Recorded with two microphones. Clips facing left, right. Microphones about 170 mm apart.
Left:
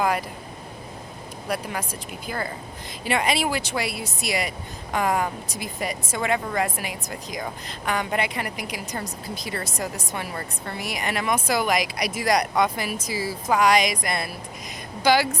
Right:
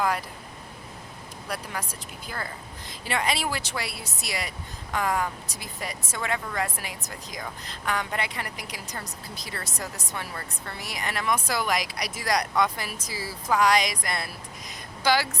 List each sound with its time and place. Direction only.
1.5 s speech: 15° left (ahead or behind)